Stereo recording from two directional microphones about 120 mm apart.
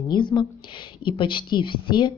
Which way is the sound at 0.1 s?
40° left (ahead or behind).